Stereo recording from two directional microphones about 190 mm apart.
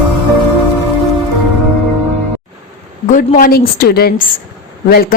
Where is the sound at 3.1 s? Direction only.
45° left (ahead or behind).